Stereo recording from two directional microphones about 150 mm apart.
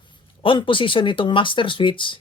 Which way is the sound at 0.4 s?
35° left (ahead or behind).